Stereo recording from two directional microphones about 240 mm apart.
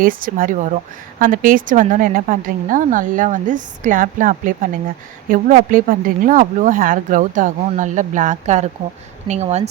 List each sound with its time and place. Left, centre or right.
0.2 s a woman's voice: right